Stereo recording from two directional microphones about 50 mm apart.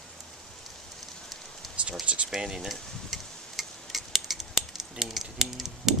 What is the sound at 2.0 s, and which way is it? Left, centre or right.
Speech, right.